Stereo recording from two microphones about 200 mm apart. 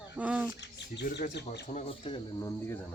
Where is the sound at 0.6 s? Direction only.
60° left (ahead or behind).